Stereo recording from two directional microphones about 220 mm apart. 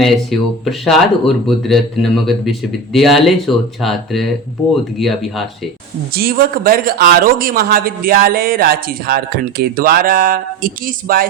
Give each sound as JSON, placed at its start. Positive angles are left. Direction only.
{"t": 0.0, "sound": "speech", "side_deg": 0}
{"t": 6.1, "sound": "speech", "side_deg": -40}